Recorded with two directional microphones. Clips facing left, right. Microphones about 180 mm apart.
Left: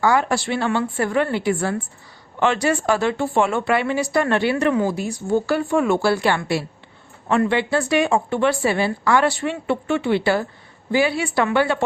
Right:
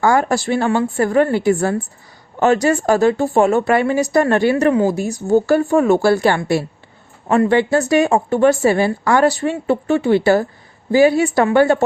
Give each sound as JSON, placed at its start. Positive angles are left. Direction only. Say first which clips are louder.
{"t": 0.0, "sound": "a woman's voice", "louder": "right 3 dB", "side_deg": -45}